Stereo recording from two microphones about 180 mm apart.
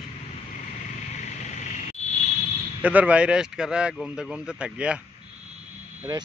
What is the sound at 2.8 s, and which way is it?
Speech, 10° right (ahead or behind).